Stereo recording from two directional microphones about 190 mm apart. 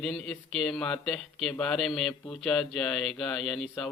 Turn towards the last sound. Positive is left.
turn(degrees=0)  # may be behind; listen again after turning